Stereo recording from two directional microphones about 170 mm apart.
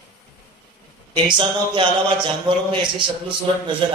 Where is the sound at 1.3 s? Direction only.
30° right (ahead or behind).